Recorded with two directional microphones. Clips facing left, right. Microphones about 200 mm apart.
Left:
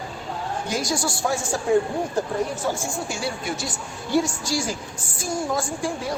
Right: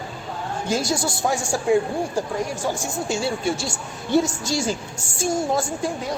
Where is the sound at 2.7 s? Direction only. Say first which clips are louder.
Right 3 dB; 20° right (ahead or behind).